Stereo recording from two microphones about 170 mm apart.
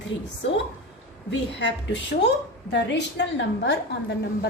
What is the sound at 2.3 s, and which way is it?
A woman's voice, 90° left.